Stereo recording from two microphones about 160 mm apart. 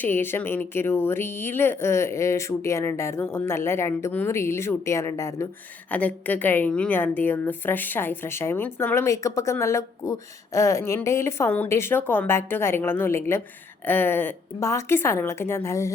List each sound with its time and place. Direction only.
0.0 s a woman's voice: 15° left (ahead or behind)